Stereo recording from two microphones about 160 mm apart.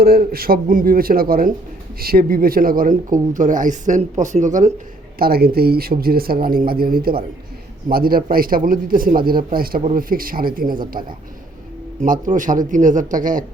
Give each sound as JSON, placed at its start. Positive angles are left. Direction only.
{"t": 0.0, "sound": "a man's voice", "side_deg": -70}
{"t": 5.2, "sound": "a man's voice", "side_deg": -70}